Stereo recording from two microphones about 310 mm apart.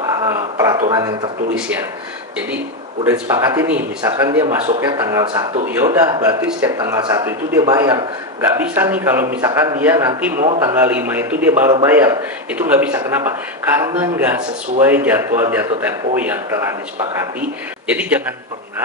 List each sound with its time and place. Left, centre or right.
0.0 s a sound: centre
2.3 s speech: centre
10.3 s a man's voice: right
10.6 s speech: centre
17.4 s a man's voice: centre